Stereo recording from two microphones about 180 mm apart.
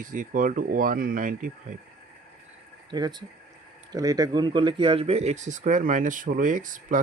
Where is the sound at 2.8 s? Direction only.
25° right (ahead or behind).